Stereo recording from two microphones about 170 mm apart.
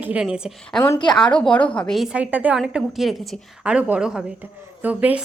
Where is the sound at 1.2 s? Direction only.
5° left (ahead or behind).